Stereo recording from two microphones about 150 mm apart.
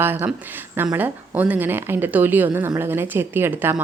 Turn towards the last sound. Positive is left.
turn(degrees=-15)  # may be behind; listen again after turning